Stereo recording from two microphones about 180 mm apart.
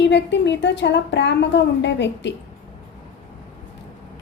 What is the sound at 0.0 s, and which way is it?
A woman's voice, 75° left (ahead or behind).